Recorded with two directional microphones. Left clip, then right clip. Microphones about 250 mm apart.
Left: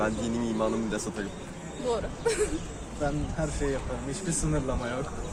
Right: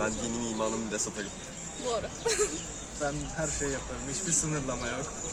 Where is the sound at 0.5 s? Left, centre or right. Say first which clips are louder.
Left 3 dB; centre.